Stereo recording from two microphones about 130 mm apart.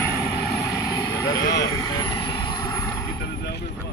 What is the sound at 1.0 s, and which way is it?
Vehicle, 30° left (ahead or behind).